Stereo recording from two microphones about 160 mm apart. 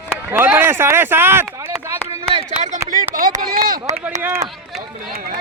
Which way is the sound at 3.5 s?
60° right (ahead or behind).